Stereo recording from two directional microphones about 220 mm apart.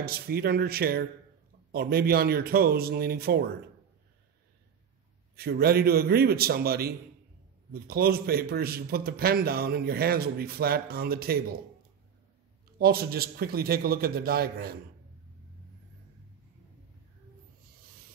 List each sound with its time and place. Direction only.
0.0 s a man's voice: 45° right (ahead or behind)
5.3 s a man's voice: 45° right (ahead or behind)
12.7 s a man's voice: 45° right (ahead or behind)